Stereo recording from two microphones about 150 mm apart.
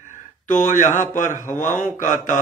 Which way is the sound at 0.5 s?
60° left (ahead or behind).